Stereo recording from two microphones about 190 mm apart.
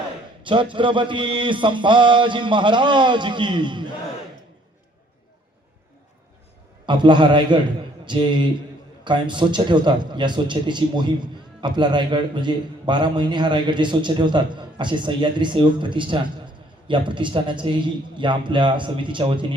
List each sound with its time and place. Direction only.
0.4 s a man's voice: 25° right (ahead or behind)
6.8 s a man's voice: 25° right (ahead or behind)